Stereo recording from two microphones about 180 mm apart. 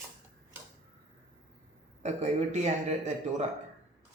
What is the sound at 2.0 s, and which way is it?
Speech, 40° right (ahead or behind).